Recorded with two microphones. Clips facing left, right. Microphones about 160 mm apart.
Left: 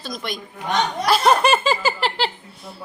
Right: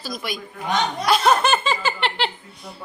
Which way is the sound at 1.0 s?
5° left (ahead or behind).